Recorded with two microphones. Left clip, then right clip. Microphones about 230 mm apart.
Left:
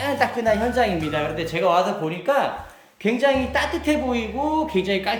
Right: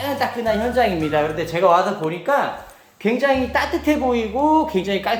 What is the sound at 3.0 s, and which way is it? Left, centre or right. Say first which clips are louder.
Speech: right 1 dB; centre.